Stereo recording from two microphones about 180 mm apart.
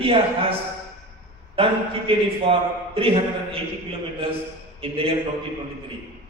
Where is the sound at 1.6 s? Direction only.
30° right (ahead or behind).